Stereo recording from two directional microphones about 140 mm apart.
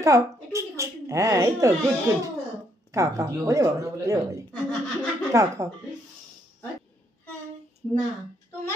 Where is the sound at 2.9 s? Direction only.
20° right (ahead or behind).